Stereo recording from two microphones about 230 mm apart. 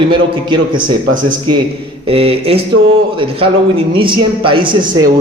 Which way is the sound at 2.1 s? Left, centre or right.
Right.